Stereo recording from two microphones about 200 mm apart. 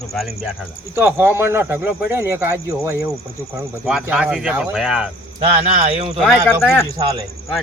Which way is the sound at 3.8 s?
5° right (ahead or behind).